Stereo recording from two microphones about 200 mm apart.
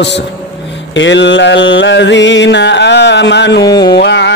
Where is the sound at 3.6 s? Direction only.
20° left (ahead or behind).